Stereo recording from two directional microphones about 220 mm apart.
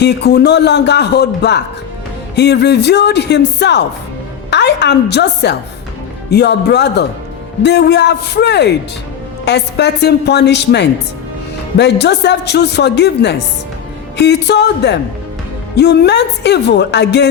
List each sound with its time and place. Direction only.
0.0 s a woman's voice: 50° left (ahead or behind)